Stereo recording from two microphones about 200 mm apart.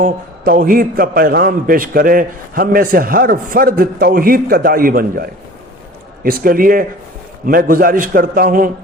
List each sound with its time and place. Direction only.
0.0 s a man's voice: 45° right (ahead or behind)